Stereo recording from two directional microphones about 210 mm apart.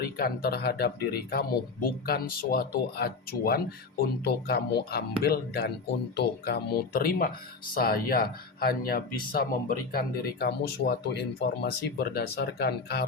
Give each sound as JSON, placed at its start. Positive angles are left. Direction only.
{"t": 0.0, "sound": "speech", "side_deg": 45}